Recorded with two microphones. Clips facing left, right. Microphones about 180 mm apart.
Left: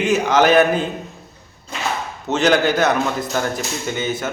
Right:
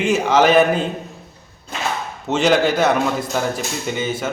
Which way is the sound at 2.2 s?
10° right (ahead or behind).